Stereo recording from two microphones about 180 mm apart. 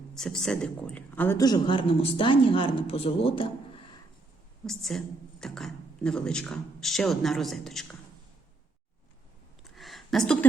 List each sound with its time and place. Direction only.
0.1 s a woman's voice: 5° left (ahead or behind); by 3.5 s 30° left (ahead or behind)
4.6 s a woman's voice: centre (ahead or behind)
9.7 s a sound: centre (ahead or behind)